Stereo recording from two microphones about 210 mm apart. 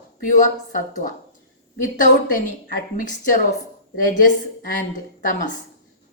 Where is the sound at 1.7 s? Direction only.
40° left (ahead or behind).